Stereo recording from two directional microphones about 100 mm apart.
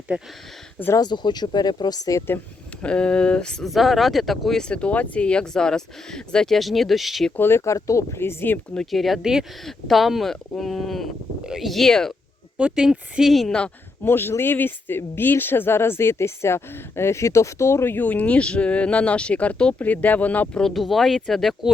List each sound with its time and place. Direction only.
0.1 s speech: 15° right (ahead or behind)
0.9 s speech: 45° left (ahead or behind)
2.8 s speech: 10° left (ahead or behind)
7.3 s speech: 25° left (ahead or behind)
8.7 s speech: 5° left (ahead or behind)
12.5 s speech: 10° right (ahead or behind)
14.0 s speech: 20° left (ahead or behind); by 21.7 s centre (ahead or behind)